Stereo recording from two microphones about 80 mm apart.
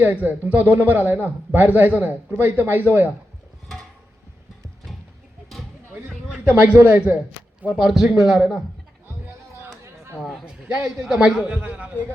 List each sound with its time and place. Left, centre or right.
0.0 s a man's voice: right
6.2 s a man's voice: centre
7.6 s a man's voice: centre
9.8 s chatter: right
10.4 s a man's voice: centre
11.4 s speech: centre